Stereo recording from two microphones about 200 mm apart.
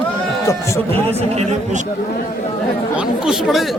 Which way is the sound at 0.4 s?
15° left (ahead or behind).